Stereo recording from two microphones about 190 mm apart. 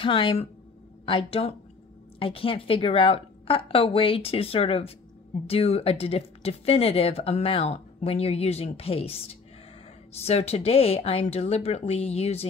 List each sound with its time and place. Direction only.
0.0 s a woman's voice: 25° left (ahead or behind)